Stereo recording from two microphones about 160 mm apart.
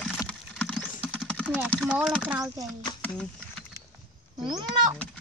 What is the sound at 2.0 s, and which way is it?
Speech, 5° right (ahead or behind).